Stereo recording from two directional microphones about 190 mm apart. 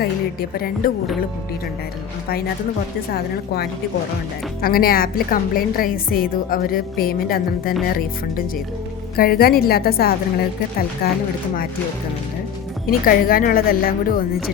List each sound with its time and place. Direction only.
0.0 s a woman's voice: 55° left (ahead or behind)
3.1 s a woman's voice: 55° left (ahead or behind)
9.1 s a woman's voice: 55° left (ahead or behind)
12.8 s a woman's voice: 50° left (ahead or behind)